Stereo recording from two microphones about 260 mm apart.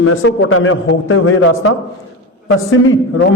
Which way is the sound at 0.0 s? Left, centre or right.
Left.